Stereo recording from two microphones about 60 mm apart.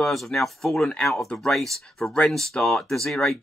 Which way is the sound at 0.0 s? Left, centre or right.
Centre.